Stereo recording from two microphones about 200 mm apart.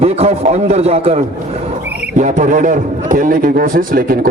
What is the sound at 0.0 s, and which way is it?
A man's voice, 30° right (ahead or behind).